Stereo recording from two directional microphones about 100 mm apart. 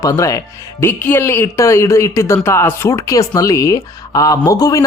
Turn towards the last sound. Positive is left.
turn(degrees=35)  # may be behind; listen again after turning